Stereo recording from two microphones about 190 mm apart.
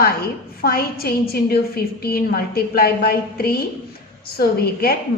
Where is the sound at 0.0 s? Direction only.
50° left (ahead or behind).